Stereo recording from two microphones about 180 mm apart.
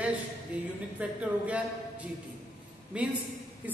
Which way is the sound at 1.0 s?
5° right (ahead or behind).